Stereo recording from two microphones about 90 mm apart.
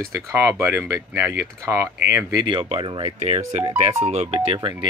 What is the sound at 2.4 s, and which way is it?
Speech, 75° right (ahead or behind).